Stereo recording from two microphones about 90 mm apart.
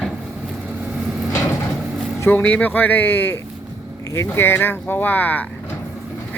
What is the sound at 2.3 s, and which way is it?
Speech, 15° left (ahead or behind).